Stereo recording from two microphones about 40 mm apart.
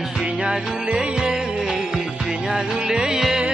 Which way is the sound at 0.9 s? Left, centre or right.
Centre.